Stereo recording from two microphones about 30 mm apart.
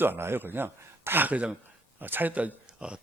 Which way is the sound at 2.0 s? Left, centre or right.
Right.